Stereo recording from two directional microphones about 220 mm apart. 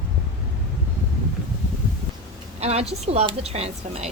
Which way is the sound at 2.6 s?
30° right (ahead or behind).